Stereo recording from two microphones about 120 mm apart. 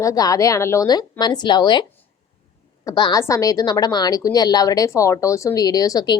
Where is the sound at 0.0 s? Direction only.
30° left (ahead or behind).